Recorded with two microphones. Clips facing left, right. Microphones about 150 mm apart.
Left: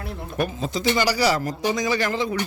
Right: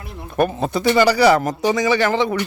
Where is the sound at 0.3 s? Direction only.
60° right (ahead or behind).